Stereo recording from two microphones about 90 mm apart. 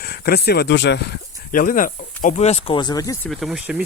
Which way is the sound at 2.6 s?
60° left (ahead or behind).